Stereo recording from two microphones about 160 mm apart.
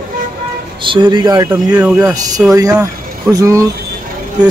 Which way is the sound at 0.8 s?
30° right (ahead or behind).